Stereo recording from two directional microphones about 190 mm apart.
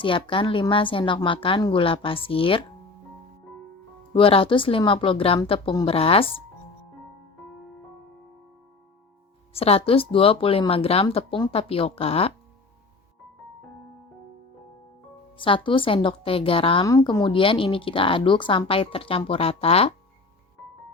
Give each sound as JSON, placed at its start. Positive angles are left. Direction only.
{"t": 0.0, "sound": "speech", "side_deg": 25}
{"t": 4.1, "sound": "speech", "side_deg": 30}
{"t": 9.5, "sound": "speech", "side_deg": 30}
{"t": 15.4, "sound": "speech", "side_deg": 25}